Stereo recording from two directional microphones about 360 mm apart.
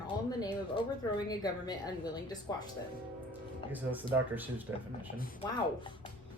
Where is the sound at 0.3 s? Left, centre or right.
Centre.